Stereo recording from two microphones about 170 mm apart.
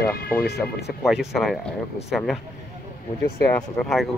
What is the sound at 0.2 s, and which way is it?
Speech, 65° left (ahead or behind).